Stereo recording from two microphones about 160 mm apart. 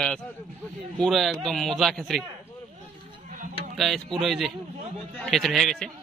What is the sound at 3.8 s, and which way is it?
A man's voice, centre (ahead or behind).